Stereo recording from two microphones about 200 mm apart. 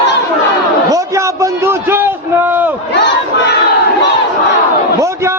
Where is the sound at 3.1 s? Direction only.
55° left (ahead or behind).